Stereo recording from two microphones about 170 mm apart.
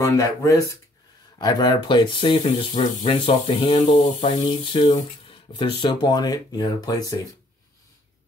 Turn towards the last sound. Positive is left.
turn(degrees=20)  # may be behind; listen again after turning